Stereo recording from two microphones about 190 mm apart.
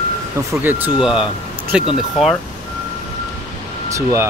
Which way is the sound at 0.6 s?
5° right (ahead or behind).